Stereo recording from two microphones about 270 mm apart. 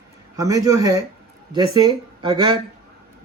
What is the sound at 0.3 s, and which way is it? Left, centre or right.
Speech, centre.